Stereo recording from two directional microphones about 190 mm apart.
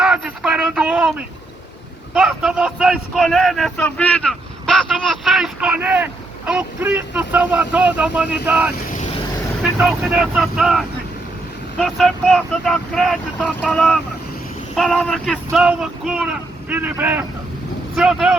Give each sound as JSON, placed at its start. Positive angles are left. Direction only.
{"t": 0.0, "sound": "a sound", "side_deg": -5}
{"t": 2.1, "sound": "speech", "side_deg": 0}
{"t": 8.9, "sound": "vehicle", "side_deg": 35}
{"t": 9.7, "sound": "speech", "side_deg": -5}